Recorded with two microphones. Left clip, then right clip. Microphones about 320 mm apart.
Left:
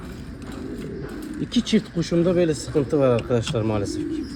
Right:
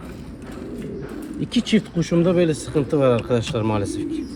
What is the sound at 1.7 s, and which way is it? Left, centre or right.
Speech, right.